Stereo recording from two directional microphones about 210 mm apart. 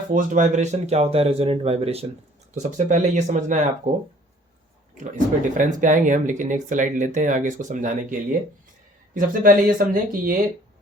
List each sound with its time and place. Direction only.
0.1 s speech: 40° right (ahead or behind)
4.9 s speech: 35° right (ahead or behind)
9.1 s speech: 45° right (ahead or behind)